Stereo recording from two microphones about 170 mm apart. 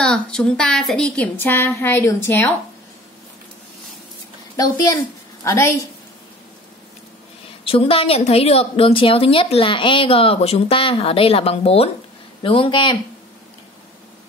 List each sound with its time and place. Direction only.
0.0 s a woman's voice: 5° left (ahead or behind)
5.4 s a woman's voice: 15° left (ahead or behind)
7.6 s a woman's voice: 35° left (ahead or behind)